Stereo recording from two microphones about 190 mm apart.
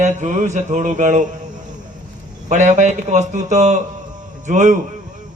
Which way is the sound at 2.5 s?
40° right (ahead or behind).